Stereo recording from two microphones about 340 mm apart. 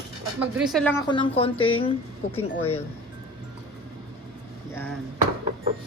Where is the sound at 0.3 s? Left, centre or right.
Centre.